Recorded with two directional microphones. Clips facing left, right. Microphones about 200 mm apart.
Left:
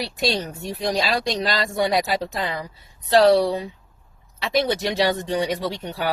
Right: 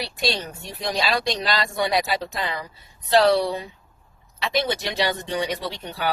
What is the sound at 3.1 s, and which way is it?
A woman's voice, 40° left (ahead or behind).